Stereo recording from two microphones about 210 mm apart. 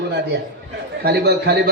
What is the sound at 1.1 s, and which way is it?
Speech, 50° right (ahead or behind).